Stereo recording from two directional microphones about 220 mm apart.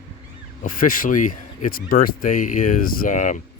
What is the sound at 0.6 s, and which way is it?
Speech, 40° left (ahead or behind).